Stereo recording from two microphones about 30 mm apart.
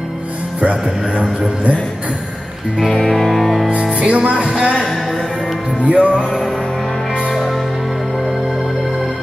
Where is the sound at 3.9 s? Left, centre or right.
Right.